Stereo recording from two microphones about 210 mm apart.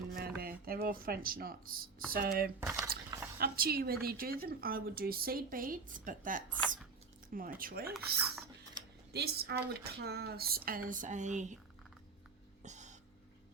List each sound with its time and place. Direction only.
0.1 s speech: 45° right (ahead or behind)
2.6 s speech: 15° right (ahead or behind)
3.3 s speech: 45° right (ahead or behind)
7.9 s speech: 10° right (ahead or behind)
9.1 s speech: 50° right (ahead or behind)
12.6 s a sound: 35° right (ahead or behind)